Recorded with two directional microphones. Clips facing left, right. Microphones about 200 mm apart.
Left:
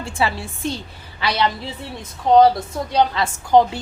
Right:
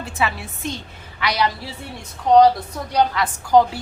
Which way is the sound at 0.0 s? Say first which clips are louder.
Left 2 dB; 30° left (ahead or behind).